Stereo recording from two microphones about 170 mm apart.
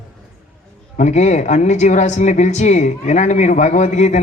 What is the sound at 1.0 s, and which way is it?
A man's voice, 40° left (ahead or behind).